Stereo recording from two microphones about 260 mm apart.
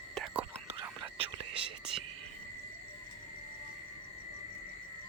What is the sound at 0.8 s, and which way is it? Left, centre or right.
Whispering, centre.